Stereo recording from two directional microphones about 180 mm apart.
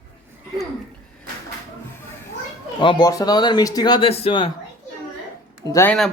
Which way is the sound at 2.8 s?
25° left (ahead or behind).